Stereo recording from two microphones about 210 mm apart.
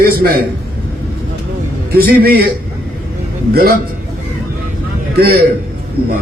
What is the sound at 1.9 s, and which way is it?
Speech, 45° right (ahead or behind).